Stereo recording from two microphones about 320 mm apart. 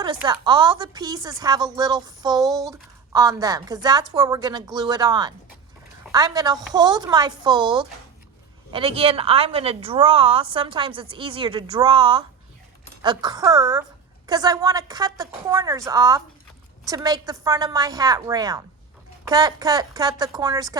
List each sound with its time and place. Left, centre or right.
0.0 s speech: centre